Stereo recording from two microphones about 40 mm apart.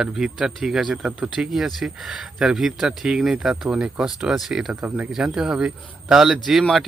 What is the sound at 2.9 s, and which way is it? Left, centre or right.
Speech, right.